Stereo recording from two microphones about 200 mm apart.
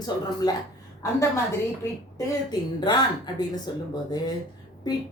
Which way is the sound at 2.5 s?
20° left (ahead or behind).